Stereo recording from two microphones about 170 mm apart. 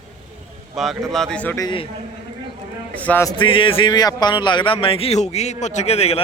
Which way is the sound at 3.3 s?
30° left (ahead or behind).